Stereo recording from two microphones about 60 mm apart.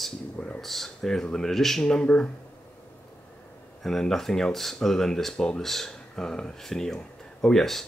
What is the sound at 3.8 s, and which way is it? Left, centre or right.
Speech, centre.